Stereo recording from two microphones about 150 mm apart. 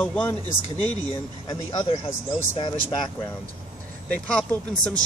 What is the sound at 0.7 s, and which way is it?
Speech, 35° left (ahead or behind).